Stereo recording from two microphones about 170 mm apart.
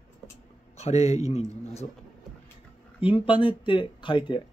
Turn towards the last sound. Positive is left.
turn(degrees=30)  # may be behind; listen again after turning